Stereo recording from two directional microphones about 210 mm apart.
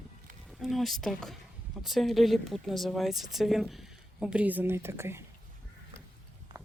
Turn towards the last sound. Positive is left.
turn(degrees=-10)  # may be behind; listen again after turning